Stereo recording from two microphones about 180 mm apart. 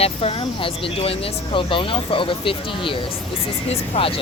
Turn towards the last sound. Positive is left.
turn(degrees=30)  # may be behind; listen again after turning